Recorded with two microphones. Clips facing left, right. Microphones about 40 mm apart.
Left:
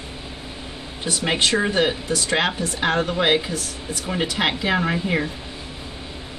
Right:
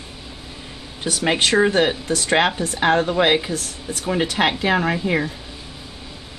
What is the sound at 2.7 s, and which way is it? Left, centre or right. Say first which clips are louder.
Speech: right 5 dB; centre.